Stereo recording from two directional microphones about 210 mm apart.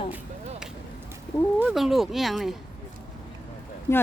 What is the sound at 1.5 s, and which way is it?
Speech, 5° right (ahead or behind).